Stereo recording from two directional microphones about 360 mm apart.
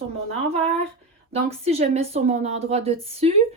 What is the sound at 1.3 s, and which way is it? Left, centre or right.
Speech, centre.